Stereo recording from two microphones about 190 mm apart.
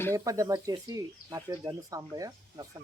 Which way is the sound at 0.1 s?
15° right (ahead or behind).